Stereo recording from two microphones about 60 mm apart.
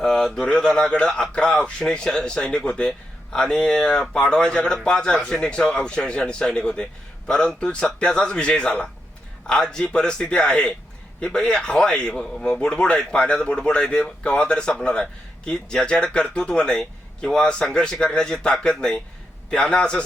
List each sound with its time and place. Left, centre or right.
0.0 s a man's voice: centre